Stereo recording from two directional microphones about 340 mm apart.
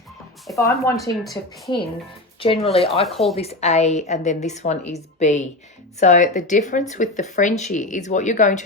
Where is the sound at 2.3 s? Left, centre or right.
Centre.